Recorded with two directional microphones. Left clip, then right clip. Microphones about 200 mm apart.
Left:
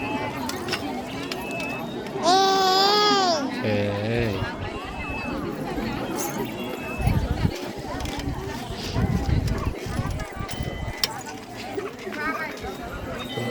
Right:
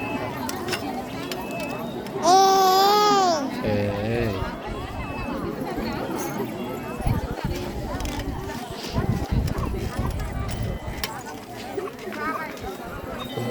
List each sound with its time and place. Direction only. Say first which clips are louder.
2.2 s baby cry: right 3 dB; 45° right (ahead or behind)
3.6 s music: even; 15° right (ahead or behind)